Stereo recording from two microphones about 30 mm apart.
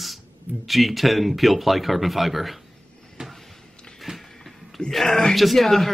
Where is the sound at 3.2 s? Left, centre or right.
Right.